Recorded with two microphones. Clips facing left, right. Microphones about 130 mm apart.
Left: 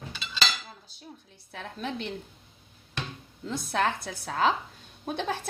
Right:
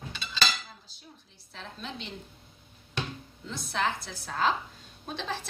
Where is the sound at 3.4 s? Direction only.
55° left (ahead or behind).